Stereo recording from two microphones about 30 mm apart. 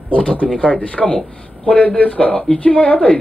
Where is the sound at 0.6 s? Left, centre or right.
Left.